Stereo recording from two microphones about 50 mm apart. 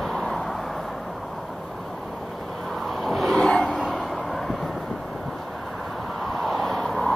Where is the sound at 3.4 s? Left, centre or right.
Centre.